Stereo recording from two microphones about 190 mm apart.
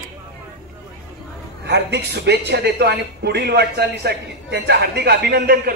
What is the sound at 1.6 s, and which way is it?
Speech, 65° right (ahead or behind).